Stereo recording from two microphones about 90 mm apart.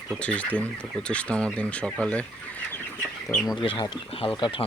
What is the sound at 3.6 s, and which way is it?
Speech, 70° left (ahead or behind).